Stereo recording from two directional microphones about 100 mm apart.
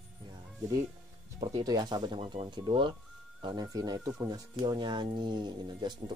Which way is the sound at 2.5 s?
50° right (ahead or behind).